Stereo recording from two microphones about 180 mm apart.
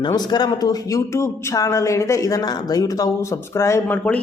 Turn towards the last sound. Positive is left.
turn(degrees=10)  # may be behind; listen again after turning